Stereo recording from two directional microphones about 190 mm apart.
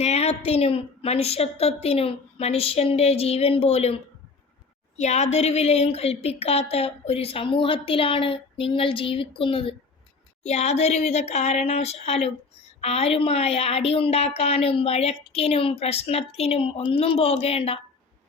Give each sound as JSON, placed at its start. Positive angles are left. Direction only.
{"t": 0.0, "sound": "a woman's voice", "side_deg": 35}